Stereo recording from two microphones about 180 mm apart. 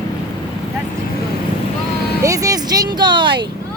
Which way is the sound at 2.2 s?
20° right (ahead or behind).